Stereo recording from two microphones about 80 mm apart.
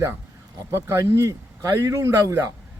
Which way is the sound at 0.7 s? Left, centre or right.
Right.